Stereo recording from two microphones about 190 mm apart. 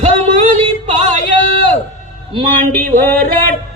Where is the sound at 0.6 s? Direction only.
35° right (ahead or behind).